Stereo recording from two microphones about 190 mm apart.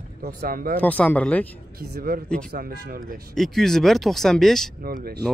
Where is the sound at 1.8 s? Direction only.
50° right (ahead or behind).